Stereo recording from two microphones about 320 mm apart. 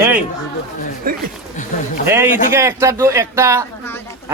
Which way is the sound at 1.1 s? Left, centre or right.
Right.